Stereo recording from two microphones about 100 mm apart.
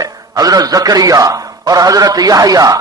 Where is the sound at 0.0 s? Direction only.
40° right (ahead or behind).